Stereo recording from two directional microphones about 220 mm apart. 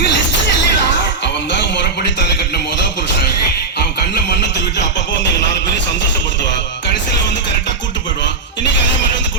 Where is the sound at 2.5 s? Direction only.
50° left (ahead or behind).